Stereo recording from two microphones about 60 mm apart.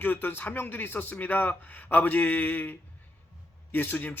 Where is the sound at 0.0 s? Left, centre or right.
Left.